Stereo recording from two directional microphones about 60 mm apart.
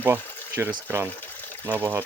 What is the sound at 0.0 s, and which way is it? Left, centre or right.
Speech, right.